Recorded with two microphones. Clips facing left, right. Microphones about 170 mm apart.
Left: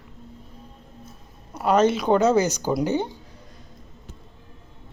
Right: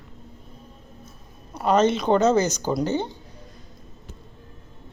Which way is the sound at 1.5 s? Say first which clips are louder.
Even; 10° left (ahead or behind).